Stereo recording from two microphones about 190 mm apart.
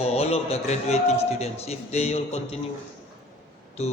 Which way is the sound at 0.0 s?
35° left (ahead or behind).